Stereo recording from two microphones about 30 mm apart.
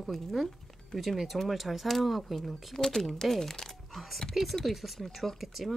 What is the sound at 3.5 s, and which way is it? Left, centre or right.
Music, centre.